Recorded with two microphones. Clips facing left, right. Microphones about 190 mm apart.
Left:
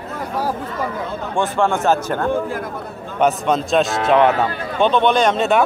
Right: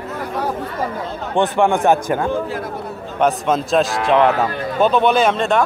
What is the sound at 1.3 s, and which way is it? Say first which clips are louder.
Speech: right 3 dB; 15° right (ahead or behind).